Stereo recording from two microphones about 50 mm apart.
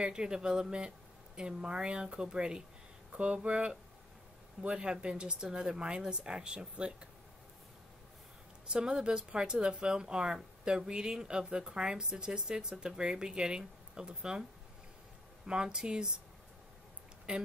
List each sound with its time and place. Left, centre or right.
0.0 s speech: centre
8.7 s speech: centre
15.4 s speech: centre
17.3 s speech: right